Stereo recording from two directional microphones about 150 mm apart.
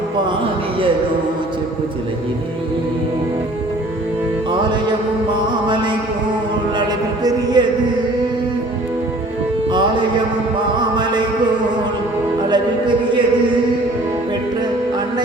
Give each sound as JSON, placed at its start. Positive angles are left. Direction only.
{"t": 4.9, "sound": "mantra", "side_deg": -30}
{"t": 7.3, "sound": "music", "side_deg": -25}
{"t": 10.8, "sound": "music", "side_deg": -30}